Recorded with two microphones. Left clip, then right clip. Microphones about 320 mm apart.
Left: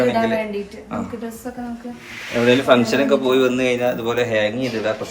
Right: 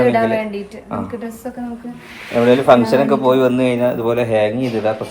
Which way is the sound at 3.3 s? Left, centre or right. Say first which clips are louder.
Right 3 dB; centre.